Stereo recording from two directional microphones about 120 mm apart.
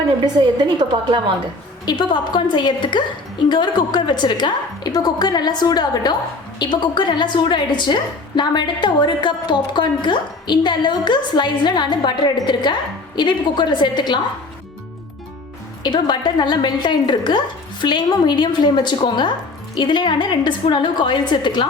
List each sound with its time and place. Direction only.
0.3 s a woman's voice: 40° right (ahead or behind)
1.8 s a woman's voice: 40° left (ahead or behind)
15.8 s a woman's voice: 35° left (ahead or behind)